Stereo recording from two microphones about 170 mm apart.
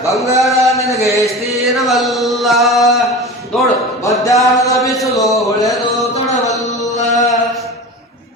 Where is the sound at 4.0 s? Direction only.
20° left (ahead or behind).